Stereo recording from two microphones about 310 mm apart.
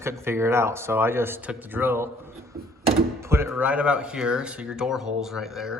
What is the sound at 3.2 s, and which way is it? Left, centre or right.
Speech, centre.